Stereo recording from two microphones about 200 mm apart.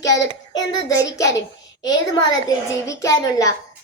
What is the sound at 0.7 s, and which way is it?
A woman's voice, 15° left (ahead or behind).